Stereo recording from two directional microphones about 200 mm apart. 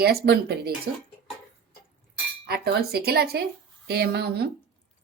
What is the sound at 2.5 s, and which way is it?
Speech, 50° right (ahead or behind).